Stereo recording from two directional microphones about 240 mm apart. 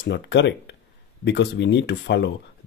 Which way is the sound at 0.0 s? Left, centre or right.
Left.